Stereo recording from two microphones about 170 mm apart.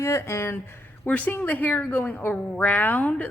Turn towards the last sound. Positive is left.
turn(degrees=10)  # may be behind; listen again after turning